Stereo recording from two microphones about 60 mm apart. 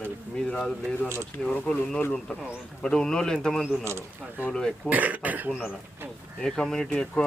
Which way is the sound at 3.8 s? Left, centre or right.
Right.